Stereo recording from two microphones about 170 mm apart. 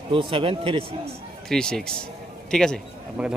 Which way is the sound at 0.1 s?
30° right (ahead or behind).